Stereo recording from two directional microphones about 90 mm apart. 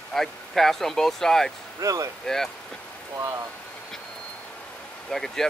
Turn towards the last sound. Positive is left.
turn(degrees=5)  # may be behind; listen again after turning